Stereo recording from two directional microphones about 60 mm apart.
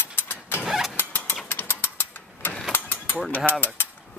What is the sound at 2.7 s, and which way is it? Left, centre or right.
Mechanisms, left.